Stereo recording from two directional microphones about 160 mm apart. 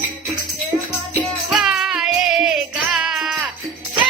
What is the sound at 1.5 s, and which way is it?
Music, 5° right (ahead or behind).